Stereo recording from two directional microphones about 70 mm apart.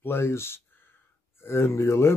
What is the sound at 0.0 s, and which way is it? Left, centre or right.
Speech, left.